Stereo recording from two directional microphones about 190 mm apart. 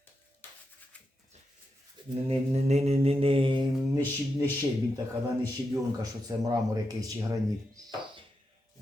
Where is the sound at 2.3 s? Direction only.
35° right (ahead or behind).